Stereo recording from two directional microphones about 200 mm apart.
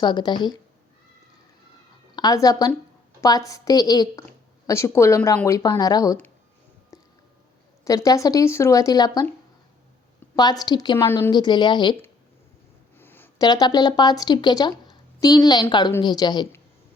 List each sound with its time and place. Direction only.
0.0 s a woman's voice: 20° left (ahead or behind)
2.1 s a woman's voice: 20° left (ahead or behind)
6.9 s a sound: 15° left (ahead or behind)
7.9 s speech: 15° left (ahead or behind)
10.3 s a woman's voice: 20° left (ahead or behind)
13.0 s speech: 10° left (ahead or behind)